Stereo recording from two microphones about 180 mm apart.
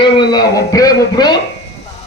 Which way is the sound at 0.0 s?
25° left (ahead or behind).